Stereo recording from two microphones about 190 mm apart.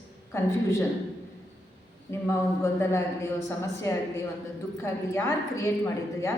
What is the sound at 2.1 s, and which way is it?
A woman's voice, 15° left (ahead or behind).